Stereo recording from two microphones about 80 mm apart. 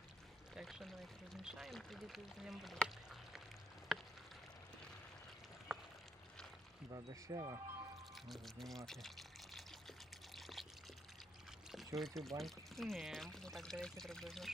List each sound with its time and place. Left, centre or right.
0.5 s speech: centre
2.8 s a sound: centre
5.7 s boat: centre
6.9 s speech: right
8.1 s speech: centre
8.9 s pour: centre
10.3 s water: centre
11.9 s speech: centre